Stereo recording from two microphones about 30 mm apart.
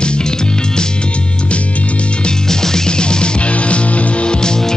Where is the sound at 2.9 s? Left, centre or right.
Left.